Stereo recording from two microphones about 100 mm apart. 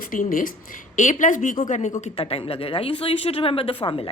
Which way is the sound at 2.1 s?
75° left (ahead or behind).